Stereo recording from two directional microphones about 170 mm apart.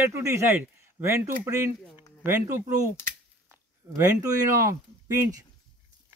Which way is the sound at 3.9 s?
20° right (ahead or behind).